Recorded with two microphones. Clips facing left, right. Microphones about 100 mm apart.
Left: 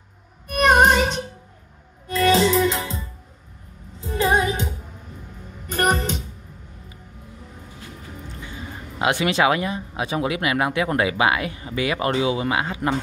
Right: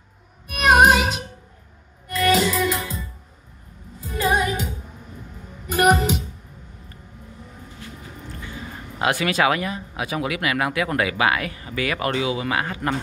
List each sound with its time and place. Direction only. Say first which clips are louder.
0.5 s music: even; 5° right (ahead or behind)
2.3 s music: left 2 dB; 30° left (ahead or behind)
5.7 s music: right 4 dB; 5° right (ahead or behind)
9.0 s speech: left 1 dB; 25° left (ahead or behind)